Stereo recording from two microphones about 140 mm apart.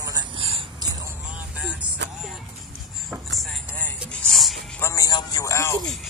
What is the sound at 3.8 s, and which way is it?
Music, centre (ahead or behind).